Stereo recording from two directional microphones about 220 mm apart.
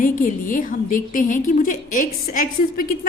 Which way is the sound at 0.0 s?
35° left (ahead or behind).